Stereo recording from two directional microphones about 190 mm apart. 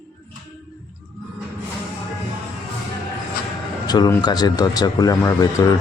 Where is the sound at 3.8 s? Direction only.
20° left (ahead or behind).